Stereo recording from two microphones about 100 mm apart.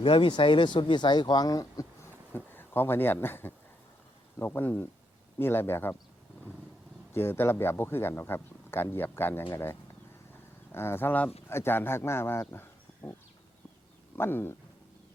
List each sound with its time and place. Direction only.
0.0 s speech: 60° left (ahead or behind); by 1.9 s 35° left (ahead or behind)
2.3 s speech: 20° left (ahead or behind)
7.1 s speech: 25° left (ahead or behind)
14.2 s speech: 20° left (ahead or behind)